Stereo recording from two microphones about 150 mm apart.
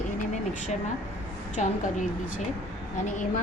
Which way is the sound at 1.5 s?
60° left (ahead or behind).